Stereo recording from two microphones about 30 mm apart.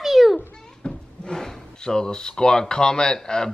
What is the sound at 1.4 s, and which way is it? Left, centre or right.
A woman's voice, left.